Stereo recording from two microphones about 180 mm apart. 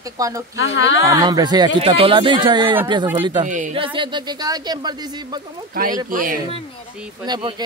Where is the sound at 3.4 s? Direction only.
45° right (ahead or behind).